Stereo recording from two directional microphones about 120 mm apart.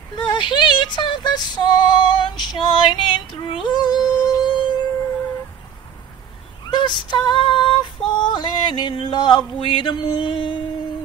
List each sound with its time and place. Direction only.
0.2 s female singing: 40° left (ahead or behind)
6.7 s female singing: 40° left (ahead or behind)